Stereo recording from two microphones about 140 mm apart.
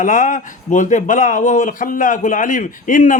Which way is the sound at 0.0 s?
70° left (ahead or behind).